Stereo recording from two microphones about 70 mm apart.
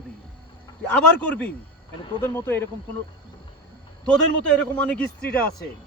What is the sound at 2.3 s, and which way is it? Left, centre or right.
Speech, left.